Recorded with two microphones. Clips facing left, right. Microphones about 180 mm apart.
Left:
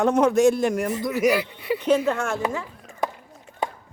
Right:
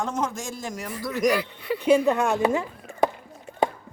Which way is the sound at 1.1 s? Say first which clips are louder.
Even; 5° left (ahead or behind).